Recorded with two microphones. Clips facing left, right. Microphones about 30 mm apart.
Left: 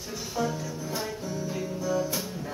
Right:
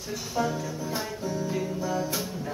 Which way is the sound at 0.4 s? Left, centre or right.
Centre.